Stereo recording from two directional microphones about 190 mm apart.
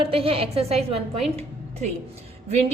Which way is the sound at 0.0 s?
30° right (ahead or behind).